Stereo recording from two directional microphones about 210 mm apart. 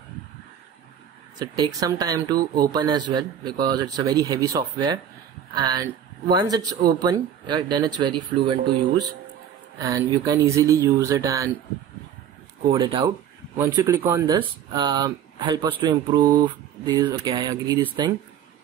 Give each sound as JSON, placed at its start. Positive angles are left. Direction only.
{"t": 1.6, "sound": "speech", "side_deg": -15}
{"t": 12.7, "sound": "speech", "side_deg": -20}